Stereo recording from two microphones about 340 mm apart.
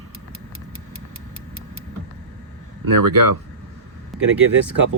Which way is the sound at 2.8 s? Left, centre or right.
Right.